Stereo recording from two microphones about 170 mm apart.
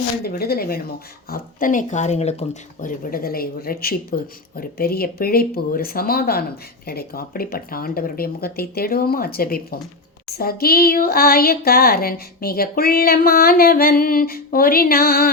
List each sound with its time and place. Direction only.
0.3 s speech: 65° left (ahead or behind)